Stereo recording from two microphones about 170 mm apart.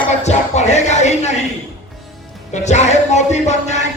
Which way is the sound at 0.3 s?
40° left (ahead or behind).